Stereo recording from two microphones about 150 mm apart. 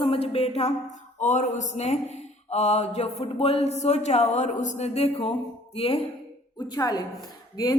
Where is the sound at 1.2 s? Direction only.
55° left (ahead or behind).